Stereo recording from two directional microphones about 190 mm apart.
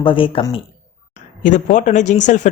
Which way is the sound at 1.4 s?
40° left (ahead or behind).